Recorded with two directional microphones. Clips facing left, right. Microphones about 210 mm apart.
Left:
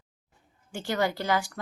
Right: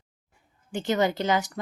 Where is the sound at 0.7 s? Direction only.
20° right (ahead or behind).